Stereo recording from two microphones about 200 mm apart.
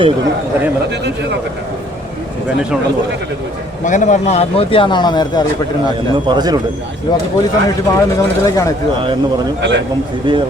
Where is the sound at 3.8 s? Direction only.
40° left (ahead or behind); by 5.3 s 20° left (ahead or behind).